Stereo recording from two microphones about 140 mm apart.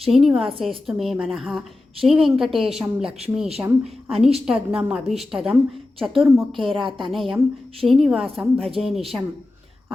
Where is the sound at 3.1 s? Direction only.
45° right (ahead or behind).